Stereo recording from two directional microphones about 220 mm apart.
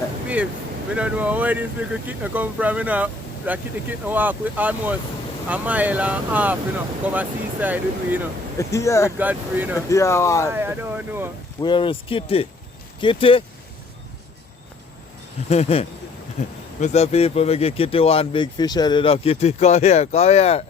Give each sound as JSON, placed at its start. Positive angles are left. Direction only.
{"t": 0.9, "sound": "speech", "side_deg": -5}
{"t": 8.5, "sound": "speech", "side_deg": 15}
{"t": 9.1, "sound": "speech", "side_deg": -10}
{"t": 9.9, "sound": "speech", "side_deg": 15}
{"t": 10.5, "sound": "speech", "side_deg": -10}
{"t": 11.6, "sound": "speech", "side_deg": 20}
{"t": 15.4, "sound": "speech", "side_deg": 30}